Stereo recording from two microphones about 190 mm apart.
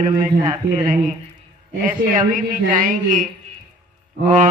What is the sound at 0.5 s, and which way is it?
Speech, 20° right (ahead or behind).